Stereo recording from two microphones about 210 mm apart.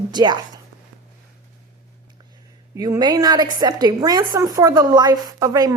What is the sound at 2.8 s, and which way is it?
A woman's voice, 20° right (ahead or behind).